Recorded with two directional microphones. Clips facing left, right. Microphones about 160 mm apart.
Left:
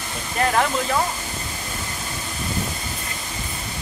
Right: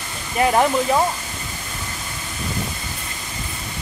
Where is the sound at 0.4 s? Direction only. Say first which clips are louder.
Right 4 dB; 20° right (ahead or behind).